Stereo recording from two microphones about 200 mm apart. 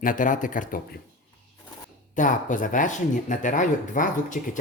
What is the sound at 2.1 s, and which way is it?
Speech, 40° left (ahead or behind).